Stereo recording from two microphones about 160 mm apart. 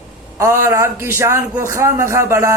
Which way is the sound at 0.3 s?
15° right (ahead or behind).